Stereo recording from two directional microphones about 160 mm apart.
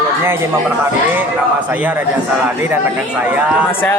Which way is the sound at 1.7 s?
10° right (ahead or behind).